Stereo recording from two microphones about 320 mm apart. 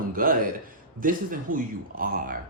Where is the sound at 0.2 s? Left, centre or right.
Right.